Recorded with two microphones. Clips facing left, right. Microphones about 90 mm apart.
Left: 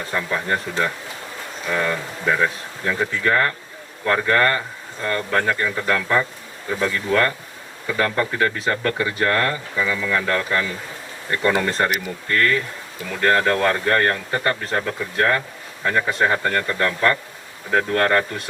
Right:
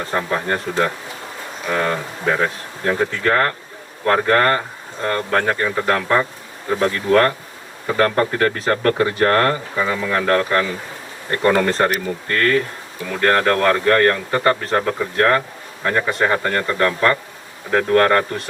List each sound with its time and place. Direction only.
0.0 s speech: 45° right (ahead or behind)